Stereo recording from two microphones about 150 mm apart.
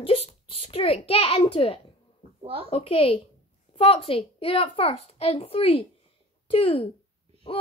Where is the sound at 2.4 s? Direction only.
40° right (ahead or behind).